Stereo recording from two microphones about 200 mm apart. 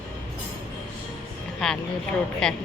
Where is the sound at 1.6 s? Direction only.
Centre (ahead or behind).